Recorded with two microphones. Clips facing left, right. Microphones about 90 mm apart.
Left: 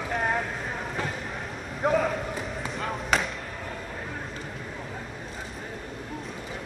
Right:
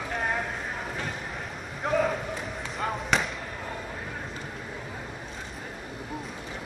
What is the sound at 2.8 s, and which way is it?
Basketball bounce, centre (ahead or behind).